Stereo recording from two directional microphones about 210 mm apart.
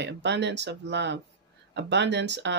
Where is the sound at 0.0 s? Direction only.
55° right (ahead or behind).